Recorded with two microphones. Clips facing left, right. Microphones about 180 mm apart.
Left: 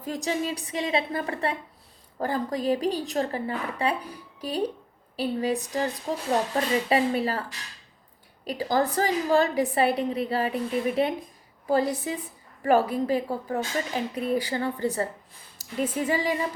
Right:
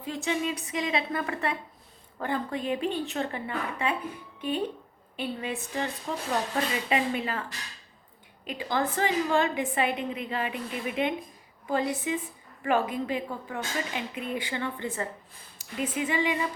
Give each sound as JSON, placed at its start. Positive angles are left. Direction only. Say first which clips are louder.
{"t": 0.0, "sound": "a woman's voice", "louder": "left 1 dB", "side_deg": 40}
{"t": 8.4, "sound": "a woman's voice", "louder": "left 4 dB", "side_deg": 40}